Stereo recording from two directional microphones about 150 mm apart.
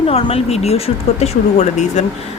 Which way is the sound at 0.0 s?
45° left (ahead or behind).